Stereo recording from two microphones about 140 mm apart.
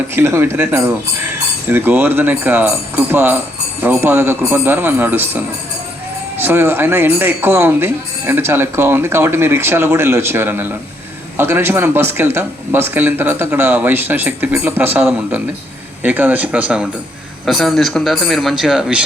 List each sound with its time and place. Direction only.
0.1 s speech: 20° right (ahead or behind)
6.4 s a man's voice: 15° right (ahead or behind)